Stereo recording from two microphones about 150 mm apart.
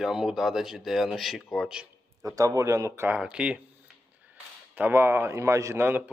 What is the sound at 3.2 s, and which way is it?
A man's voice, 5° right (ahead or behind).